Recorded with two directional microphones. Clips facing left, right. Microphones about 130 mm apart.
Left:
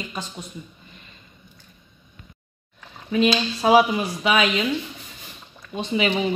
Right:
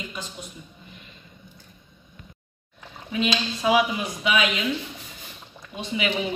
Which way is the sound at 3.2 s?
40° left (ahead or behind).